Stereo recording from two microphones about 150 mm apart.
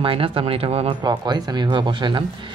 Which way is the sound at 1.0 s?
30° right (ahead or behind).